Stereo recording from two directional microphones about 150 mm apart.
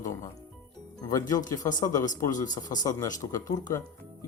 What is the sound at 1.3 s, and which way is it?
Speech, 25° left (ahead or behind).